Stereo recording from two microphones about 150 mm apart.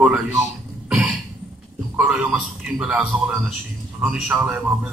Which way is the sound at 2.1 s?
5° right (ahead or behind).